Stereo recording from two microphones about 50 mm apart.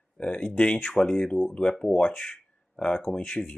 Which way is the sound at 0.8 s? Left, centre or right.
Centre.